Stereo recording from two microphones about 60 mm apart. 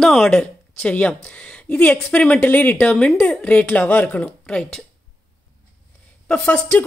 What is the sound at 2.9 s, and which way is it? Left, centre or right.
A woman's voice, centre.